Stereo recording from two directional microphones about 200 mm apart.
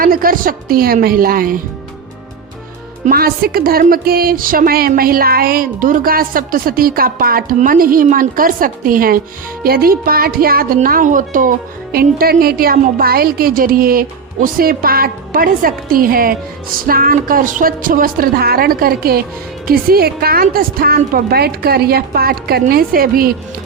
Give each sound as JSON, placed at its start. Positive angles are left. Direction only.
{"t": 0.0, "sound": "speech", "side_deg": -45}
{"t": 3.1, "sound": "speech", "side_deg": -45}